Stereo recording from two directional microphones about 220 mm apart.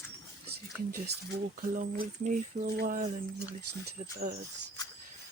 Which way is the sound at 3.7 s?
90° right.